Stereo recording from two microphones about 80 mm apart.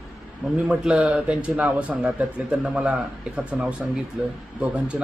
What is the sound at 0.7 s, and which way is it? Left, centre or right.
A man's voice, centre.